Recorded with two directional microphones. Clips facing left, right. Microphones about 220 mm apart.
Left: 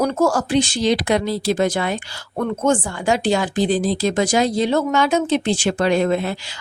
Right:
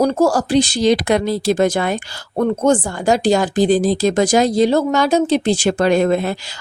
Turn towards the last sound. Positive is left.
turn(degrees=-45)  # may be behind; listen again after turning